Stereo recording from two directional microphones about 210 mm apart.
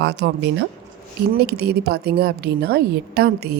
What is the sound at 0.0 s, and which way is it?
Speech, 55° right (ahead or behind).